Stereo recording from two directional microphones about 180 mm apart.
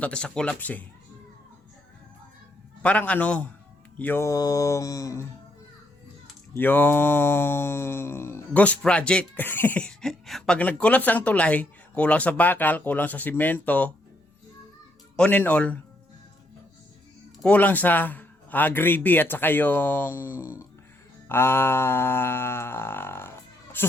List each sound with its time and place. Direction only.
0.0 s mantra: 5° left (ahead or behind)
2.8 s mantra: 5° left (ahead or behind)
6.6 s mantra: 10° left (ahead or behind)
15.1 s mantra: 5° left (ahead or behind)
17.4 s mantra: 10° left (ahead or behind)
21.2 s a sound: 15° left (ahead or behind)